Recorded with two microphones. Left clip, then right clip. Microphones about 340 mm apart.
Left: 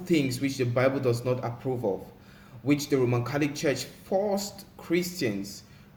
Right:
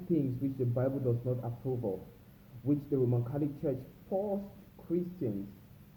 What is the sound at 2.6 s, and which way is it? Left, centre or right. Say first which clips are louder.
A man's voice: left 6 dB; left.